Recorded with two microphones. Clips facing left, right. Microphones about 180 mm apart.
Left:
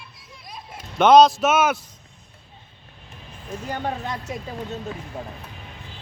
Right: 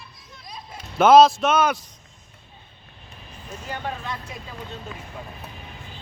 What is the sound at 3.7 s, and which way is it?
Speech, 40° left (ahead or behind).